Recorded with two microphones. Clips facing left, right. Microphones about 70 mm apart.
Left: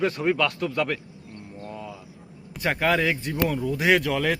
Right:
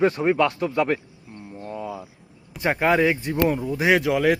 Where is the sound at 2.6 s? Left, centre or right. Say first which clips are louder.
Right 3 dB; right.